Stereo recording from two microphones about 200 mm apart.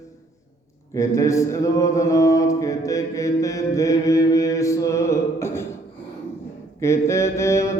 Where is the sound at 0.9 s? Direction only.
15° left (ahead or behind).